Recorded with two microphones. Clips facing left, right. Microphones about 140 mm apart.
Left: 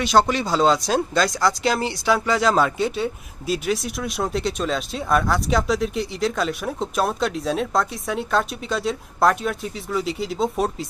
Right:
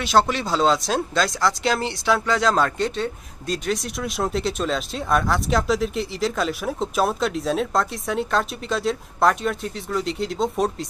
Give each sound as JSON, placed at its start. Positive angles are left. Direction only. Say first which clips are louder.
{"t": 0.0, "sound": "speech", "louder": "left 1 dB", "side_deg": 0}